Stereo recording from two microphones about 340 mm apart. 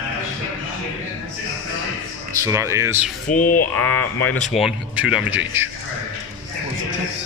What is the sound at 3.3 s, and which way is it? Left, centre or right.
Speech, left.